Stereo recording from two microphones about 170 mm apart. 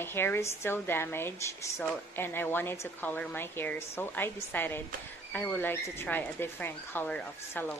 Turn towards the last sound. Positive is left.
turn(degrees=10)  # may be behind; listen again after turning